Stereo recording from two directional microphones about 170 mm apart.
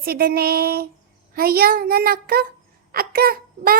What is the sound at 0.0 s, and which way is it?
A child's voice, 60° right (ahead or behind).